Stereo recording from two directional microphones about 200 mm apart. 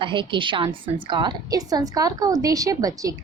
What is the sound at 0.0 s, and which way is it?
A woman's voice, 25° right (ahead or behind).